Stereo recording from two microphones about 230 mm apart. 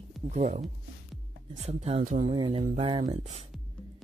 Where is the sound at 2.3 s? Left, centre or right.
Right.